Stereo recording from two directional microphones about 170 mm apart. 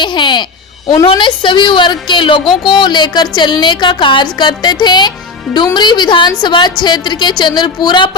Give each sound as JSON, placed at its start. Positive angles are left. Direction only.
{"t": 0.0, "sound": "a woman's voice", "side_deg": 25}